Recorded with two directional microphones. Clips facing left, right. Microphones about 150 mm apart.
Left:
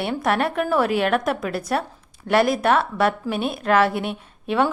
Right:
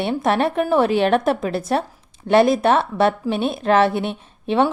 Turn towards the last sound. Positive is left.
turn(degrees=-25)  # may be behind; listen again after turning